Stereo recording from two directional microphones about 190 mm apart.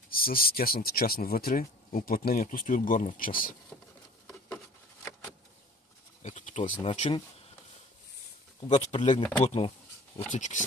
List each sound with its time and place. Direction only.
0.1 s speech: 50° left (ahead or behind)
6.2 s speech: 35° left (ahead or behind)
8.5 s speech: 30° left (ahead or behind)